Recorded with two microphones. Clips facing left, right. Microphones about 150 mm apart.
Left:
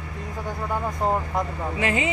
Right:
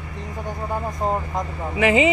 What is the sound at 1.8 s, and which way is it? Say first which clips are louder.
Speech: right 8 dB; 90° right.